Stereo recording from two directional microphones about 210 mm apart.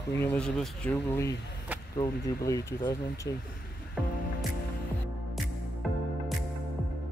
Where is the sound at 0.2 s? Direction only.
5° left (ahead or behind).